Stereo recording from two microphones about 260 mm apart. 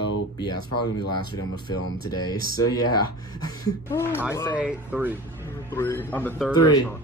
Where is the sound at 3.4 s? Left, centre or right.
Centre.